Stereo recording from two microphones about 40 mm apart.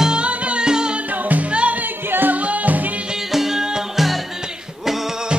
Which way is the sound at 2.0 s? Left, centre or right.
Right.